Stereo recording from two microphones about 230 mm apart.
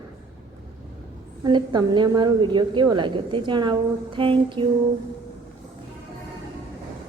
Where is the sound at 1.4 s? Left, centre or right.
Centre.